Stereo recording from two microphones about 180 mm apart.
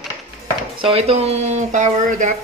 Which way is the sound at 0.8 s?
35° right (ahead or behind).